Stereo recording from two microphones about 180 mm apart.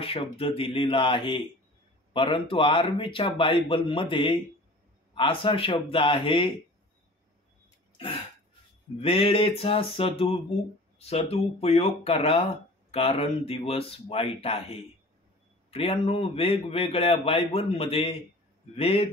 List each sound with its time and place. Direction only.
0.0 s speech: 30° left (ahead or behind)
9.0 s a man's voice: 30° left (ahead or behind)